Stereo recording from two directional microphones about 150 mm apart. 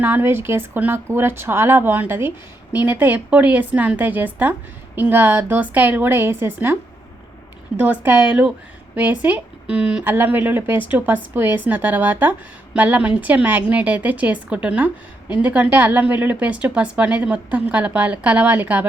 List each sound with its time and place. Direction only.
0.0 s a woman's voice: 15° right (ahead or behind)
7.8 s a woman's voice: 10° right (ahead or behind)